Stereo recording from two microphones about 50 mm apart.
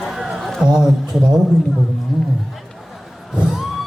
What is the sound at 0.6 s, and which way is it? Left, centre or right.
Speech, centre.